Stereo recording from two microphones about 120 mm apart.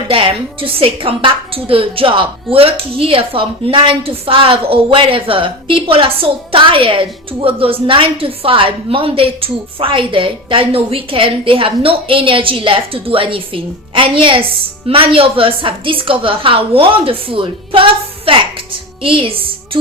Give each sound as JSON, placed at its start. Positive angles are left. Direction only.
{"t": 0.1, "sound": "a woman's voice", "side_deg": -50}